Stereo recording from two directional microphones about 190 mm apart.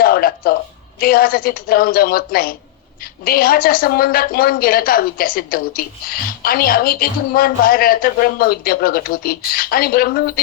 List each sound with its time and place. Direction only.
0.0 s a woman's voice: 50° left (ahead or behind)